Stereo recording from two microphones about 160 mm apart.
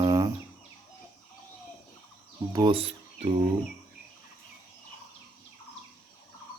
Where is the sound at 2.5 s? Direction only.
30° right (ahead or behind).